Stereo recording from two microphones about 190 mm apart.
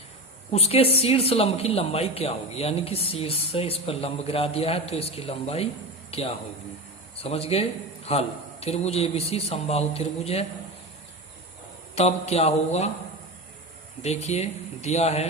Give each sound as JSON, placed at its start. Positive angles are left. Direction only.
{"t": 0.5, "sound": "a man's voice", "side_deg": 30}
{"t": 11.9, "sound": "speech", "side_deg": 35}
{"t": 14.0, "sound": "speech", "side_deg": 35}